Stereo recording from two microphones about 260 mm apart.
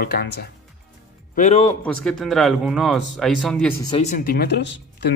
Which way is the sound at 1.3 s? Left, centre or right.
Left.